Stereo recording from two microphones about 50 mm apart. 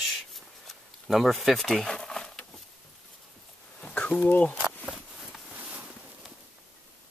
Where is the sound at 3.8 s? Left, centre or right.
Left.